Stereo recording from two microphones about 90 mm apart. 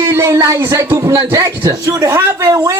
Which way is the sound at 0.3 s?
35° right (ahead or behind).